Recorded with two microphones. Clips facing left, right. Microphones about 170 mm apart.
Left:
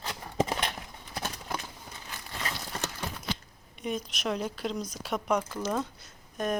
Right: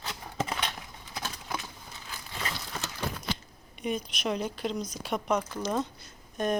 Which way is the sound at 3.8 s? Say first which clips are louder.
Right 1 dB; centre (ahead or behind).